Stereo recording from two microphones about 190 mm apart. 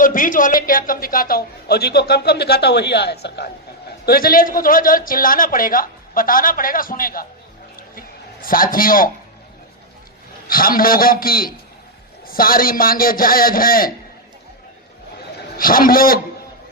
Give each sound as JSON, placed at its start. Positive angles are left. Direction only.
{"t": 0.0, "sound": "a man's voice", "side_deg": 45}
{"t": 7.8, "sound": "a sound", "side_deg": 50}
{"t": 10.5, "sound": "speech", "side_deg": 50}
{"t": 15.5, "sound": "speech", "side_deg": 50}